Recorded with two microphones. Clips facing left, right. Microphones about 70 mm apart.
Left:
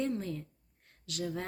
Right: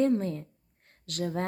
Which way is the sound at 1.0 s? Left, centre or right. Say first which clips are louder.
Right 4 dB; right.